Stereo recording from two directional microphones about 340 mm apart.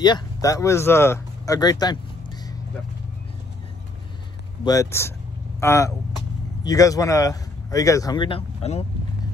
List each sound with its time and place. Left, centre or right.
0.0 s speech: centre
4.6 s speech: centre